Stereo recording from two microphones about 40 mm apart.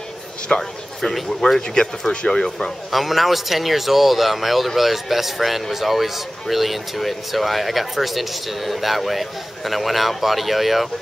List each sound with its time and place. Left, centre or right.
0.5 s speech: left
1.4 s speech: centre
2.9 s speech: centre